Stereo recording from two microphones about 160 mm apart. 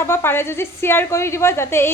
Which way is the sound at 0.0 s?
15° left (ahead or behind).